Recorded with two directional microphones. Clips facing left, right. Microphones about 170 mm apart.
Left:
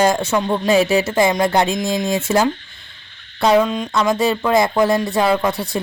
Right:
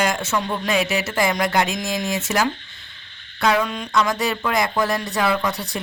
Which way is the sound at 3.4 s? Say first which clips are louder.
Left 6 dB; 30° left (ahead or behind).